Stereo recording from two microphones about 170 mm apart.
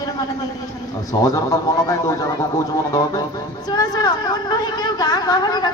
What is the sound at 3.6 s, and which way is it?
A man's voice, 25° left (ahead or behind).